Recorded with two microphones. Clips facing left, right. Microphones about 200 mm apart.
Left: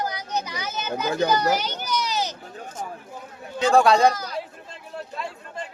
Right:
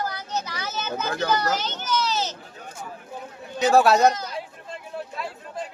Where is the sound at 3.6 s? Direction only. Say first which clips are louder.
Even; 5° right (ahead or behind).